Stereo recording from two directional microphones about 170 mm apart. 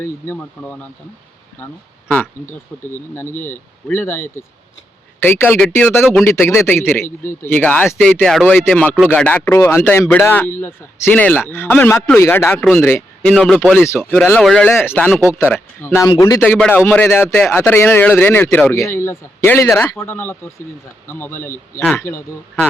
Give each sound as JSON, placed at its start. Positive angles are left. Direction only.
{"t": 0.0, "sound": "speech", "side_deg": 10}
{"t": 2.1, "sound": "a sound", "side_deg": 5}
{"t": 2.5, "sound": "speech", "side_deg": 15}
{"t": 6.5, "sound": "speech", "side_deg": 15}
{"t": 14.0, "sound": "speech", "side_deg": 0}
{"t": 16.4, "sound": "speech", "side_deg": 5}